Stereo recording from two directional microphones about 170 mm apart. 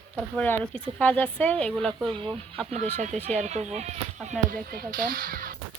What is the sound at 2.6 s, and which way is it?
Speech, 40° right (ahead or behind).